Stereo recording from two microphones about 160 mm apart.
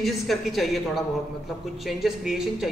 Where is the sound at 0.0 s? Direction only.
Centre (ahead or behind).